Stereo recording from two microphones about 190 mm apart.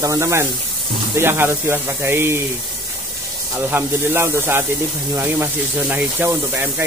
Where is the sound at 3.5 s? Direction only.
10° right (ahead or behind).